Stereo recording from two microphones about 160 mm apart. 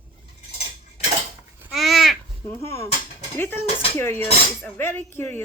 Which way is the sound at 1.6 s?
Centre (ahead or behind).